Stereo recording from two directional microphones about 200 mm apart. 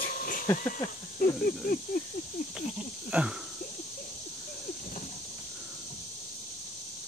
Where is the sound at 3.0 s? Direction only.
5° right (ahead or behind).